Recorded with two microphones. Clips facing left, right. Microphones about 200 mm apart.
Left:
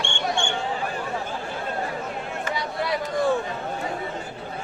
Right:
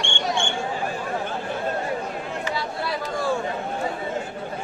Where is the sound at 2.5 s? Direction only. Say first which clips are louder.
Left 5 dB; 20° left (ahead or behind).